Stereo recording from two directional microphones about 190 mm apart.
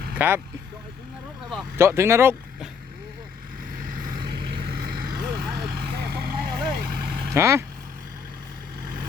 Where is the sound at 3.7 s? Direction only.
45° right (ahead or behind).